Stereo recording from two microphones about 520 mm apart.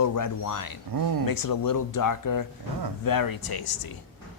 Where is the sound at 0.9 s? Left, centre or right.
Right.